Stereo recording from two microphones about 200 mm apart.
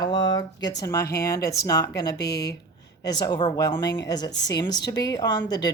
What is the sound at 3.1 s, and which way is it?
Speech, 20° left (ahead or behind).